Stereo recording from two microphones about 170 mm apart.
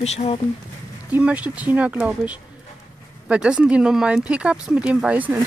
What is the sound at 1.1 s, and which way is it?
Speech, 10° right (ahead or behind).